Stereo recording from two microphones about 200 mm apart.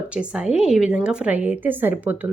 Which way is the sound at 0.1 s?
5° right (ahead or behind).